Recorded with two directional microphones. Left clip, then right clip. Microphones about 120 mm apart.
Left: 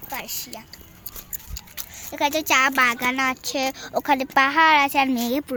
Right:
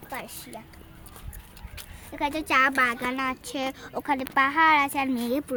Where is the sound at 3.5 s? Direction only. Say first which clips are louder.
Left 6 dB; 45° left (ahead or behind).